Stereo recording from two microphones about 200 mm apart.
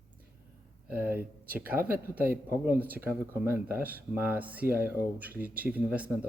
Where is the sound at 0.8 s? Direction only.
10° right (ahead or behind).